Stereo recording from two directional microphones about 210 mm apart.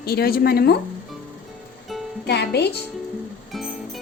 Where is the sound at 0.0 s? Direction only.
45° left (ahead or behind).